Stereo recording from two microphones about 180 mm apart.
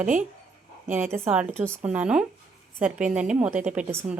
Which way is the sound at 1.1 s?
10° right (ahead or behind).